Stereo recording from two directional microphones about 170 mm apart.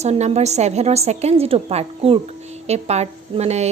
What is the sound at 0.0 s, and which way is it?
A woman's voice, 40° right (ahead or behind).